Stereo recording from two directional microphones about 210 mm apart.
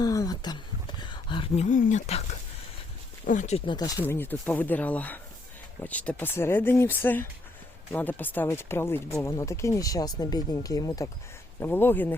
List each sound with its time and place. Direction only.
0.0 s a sound: 15° left (ahead or behind)
3.2 s speech: 35° left (ahead or behind)
3.8 s speech: 15° left (ahead or behind)